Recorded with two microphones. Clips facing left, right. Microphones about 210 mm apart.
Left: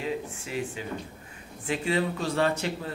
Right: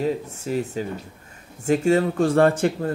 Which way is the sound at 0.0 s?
40° right (ahead or behind).